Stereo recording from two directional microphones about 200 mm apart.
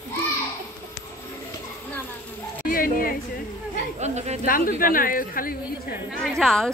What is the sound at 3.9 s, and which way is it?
Speech, 35° right (ahead or behind).